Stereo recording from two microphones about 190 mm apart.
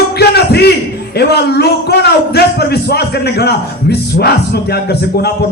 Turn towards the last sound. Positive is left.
turn(degrees=60)  # may be behind; listen again after turning